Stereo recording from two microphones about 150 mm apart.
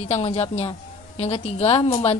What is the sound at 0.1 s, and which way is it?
A woman's voice, 45° left (ahead or behind).